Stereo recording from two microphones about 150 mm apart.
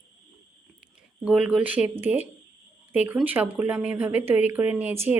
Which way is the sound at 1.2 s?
5° right (ahead or behind).